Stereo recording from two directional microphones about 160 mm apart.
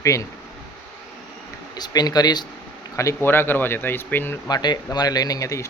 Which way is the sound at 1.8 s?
25° left (ahead or behind).